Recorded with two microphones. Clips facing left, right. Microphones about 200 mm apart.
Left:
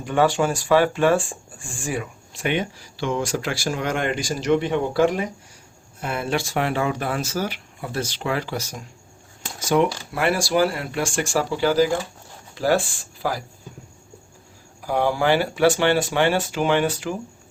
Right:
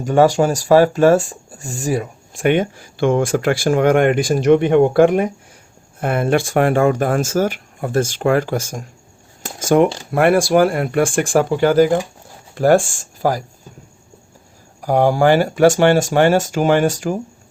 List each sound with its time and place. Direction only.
0.0 s speech: 40° right (ahead or behind)
9.4 s a sound: 45° right (ahead or behind)
10.1 s speech: 55° right (ahead or behind)
14.8 s speech: 45° right (ahead or behind)